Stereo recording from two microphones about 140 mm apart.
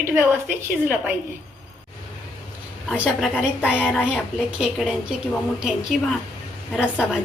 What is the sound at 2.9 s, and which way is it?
A woman's voice, 5° right (ahead or behind).